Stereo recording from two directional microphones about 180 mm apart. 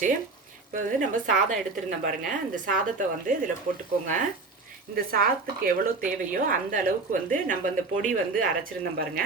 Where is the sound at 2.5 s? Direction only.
45° right (ahead or behind).